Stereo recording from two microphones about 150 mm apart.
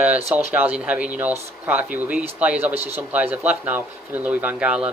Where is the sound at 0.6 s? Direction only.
10° right (ahead or behind).